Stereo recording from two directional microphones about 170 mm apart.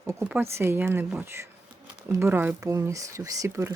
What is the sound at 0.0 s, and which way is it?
Speech, 10° right (ahead or behind).